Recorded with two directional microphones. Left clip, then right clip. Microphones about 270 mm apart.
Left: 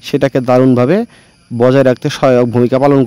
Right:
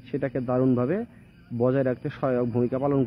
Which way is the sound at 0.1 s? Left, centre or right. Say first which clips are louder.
Left 16 dB; left.